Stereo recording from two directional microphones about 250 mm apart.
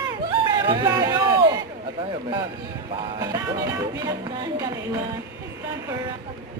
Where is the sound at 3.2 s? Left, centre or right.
Centre.